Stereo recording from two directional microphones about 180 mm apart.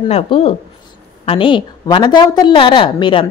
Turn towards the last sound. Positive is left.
turn(degrees=30)  # may be behind; listen again after turning